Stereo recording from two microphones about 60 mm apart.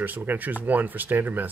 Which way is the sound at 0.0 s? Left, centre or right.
Right.